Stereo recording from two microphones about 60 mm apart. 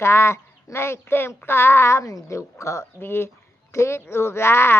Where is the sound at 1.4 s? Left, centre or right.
Left.